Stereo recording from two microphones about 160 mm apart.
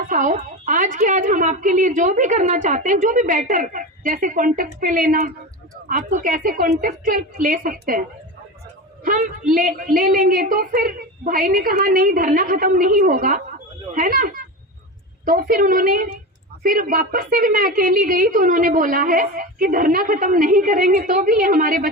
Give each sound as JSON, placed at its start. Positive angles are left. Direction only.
{"t": 0.0, "sound": "a woman's voice", "side_deg": -55}
{"t": 9.0, "sound": "a woman's voice", "side_deg": -60}